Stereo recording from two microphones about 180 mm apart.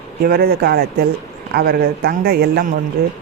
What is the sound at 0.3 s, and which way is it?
Speech, 60° right (ahead or behind).